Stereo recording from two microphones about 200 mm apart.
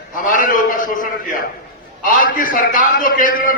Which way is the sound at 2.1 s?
45° left (ahead or behind).